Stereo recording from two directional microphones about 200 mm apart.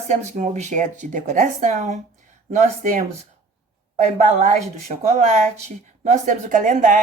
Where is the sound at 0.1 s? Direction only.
35° right (ahead or behind).